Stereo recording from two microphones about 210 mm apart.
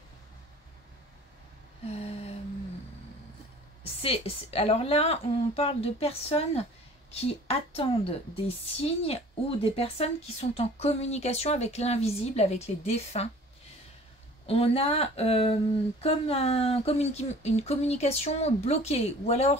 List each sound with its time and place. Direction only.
1.9 s humming: 30° left (ahead or behind)
3.8 s a woman's voice: 30° left (ahead or behind)
14.4 s a woman's voice: 25° left (ahead or behind)